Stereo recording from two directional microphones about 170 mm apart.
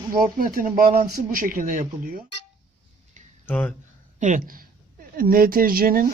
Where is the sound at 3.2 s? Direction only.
50° right (ahead or behind).